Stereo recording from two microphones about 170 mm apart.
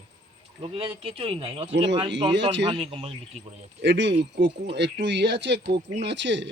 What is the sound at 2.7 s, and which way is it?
Speech, 35° right (ahead or behind).